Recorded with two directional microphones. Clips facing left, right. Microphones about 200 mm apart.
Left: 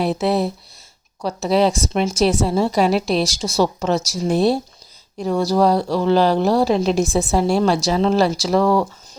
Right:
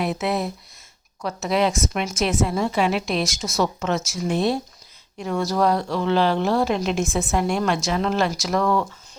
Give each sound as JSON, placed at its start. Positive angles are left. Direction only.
{"t": 0.0, "sound": "a woman's voice", "side_deg": 30}